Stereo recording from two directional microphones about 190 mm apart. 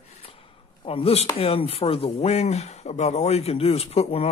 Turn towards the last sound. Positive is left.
turn(degrees=35)  # may be behind; listen again after turning